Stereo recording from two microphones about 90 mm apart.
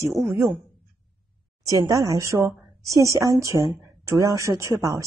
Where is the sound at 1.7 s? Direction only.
40° right (ahead or behind).